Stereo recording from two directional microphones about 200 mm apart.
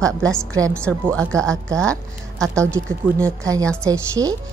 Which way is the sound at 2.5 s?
15° right (ahead or behind).